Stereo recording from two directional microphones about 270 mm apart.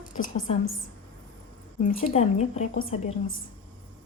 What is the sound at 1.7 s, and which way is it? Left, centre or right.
A woman's voice, left.